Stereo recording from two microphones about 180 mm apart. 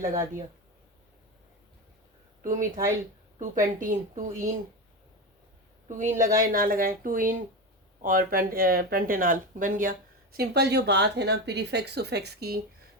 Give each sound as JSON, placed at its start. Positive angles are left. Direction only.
{"t": 2.4, "sound": "speech", "side_deg": -45}
{"t": 6.1, "sound": "a woman's voice", "side_deg": -15}
{"t": 6.4, "sound": "speech", "side_deg": -55}
{"t": 10.3, "sound": "speech", "side_deg": -60}